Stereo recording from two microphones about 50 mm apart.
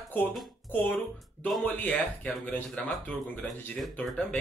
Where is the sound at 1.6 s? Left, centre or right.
Left.